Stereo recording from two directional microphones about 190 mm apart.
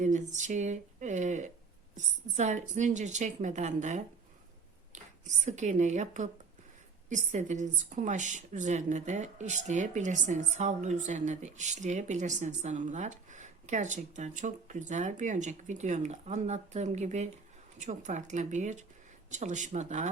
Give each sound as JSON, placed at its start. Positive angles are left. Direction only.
{"t": 0.0, "sound": "a woman's voice", "side_deg": -40}